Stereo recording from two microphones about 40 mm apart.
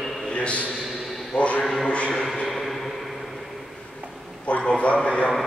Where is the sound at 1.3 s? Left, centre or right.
Left.